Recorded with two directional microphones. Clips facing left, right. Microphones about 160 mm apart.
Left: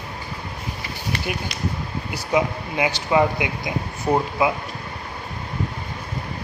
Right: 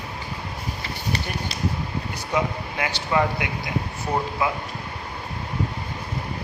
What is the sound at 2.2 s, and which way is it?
Speech, 15° left (ahead or behind).